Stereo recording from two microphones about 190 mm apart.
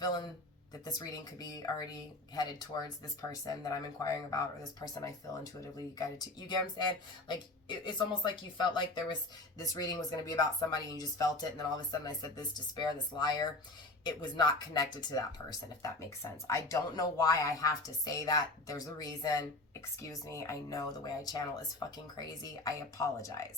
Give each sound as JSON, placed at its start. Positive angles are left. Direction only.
{"t": 0.9, "sound": "speech", "side_deg": 20}
{"t": 7.9, "sound": "speech", "side_deg": 25}